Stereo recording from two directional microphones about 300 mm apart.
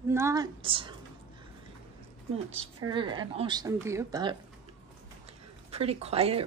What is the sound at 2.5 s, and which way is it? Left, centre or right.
Speech, right.